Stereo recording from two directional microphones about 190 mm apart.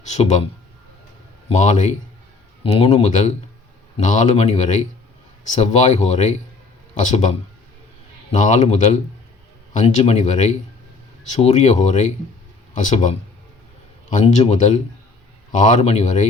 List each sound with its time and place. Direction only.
0.0 s a man's voice: 35° left (ahead or behind)
1.5 s speech: 40° left (ahead or behind)